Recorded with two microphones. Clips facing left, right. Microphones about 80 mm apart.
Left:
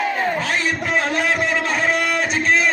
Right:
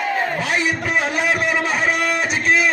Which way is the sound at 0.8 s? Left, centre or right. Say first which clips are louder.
Even; centre.